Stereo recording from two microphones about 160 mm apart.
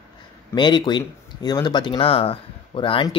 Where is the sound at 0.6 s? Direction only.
30° left (ahead or behind).